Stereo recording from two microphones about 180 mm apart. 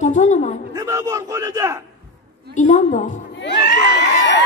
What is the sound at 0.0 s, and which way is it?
Speech, 40° left (ahead or behind).